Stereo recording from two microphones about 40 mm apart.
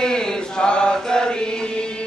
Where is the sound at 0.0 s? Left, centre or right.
Centre.